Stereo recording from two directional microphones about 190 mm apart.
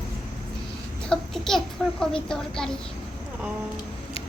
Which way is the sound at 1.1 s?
5° left (ahead or behind).